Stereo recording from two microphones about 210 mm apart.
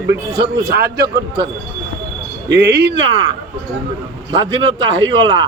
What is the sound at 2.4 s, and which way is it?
Speech, 55° right (ahead or behind).